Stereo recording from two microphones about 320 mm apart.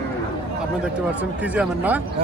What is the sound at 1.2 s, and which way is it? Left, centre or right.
Speech, centre.